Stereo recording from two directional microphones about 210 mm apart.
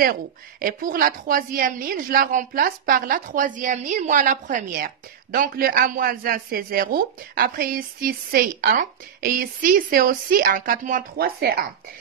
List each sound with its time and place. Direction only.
0.0 s a woman's voice: 45° right (ahead or behind)